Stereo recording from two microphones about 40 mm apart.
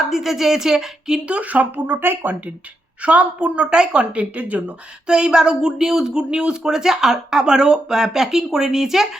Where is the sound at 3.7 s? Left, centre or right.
Right.